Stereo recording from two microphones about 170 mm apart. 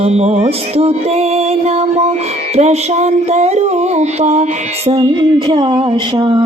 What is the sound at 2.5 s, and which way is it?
Mantra, 40° right (ahead or behind).